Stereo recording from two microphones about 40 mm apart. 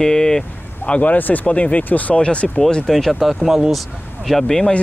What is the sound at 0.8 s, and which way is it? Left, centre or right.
Speech, left.